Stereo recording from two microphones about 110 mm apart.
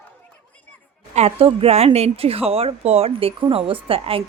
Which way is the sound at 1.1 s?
70° right (ahead or behind).